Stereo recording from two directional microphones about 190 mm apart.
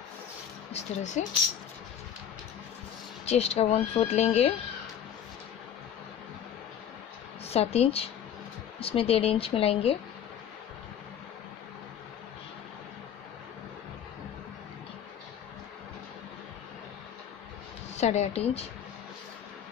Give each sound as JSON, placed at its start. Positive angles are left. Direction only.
{"t": 0.7, "sound": "speech", "side_deg": 40}
{"t": 3.3, "sound": "speech", "side_deg": 35}
{"t": 7.4, "sound": "speech", "side_deg": 35}
{"t": 17.9, "sound": "speech", "side_deg": 35}